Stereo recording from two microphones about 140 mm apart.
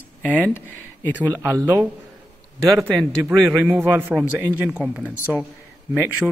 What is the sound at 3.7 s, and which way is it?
Speech, 15° right (ahead or behind).